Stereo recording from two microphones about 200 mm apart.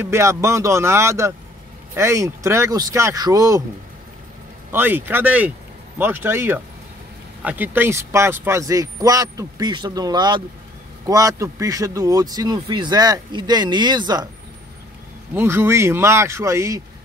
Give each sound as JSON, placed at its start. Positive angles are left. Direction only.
{"t": 0.0, "sound": "speech", "side_deg": -15}
{"t": 4.7, "sound": "speech", "side_deg": -10}
{"t": 15.3, "sound": "speech", "side_deg": -10}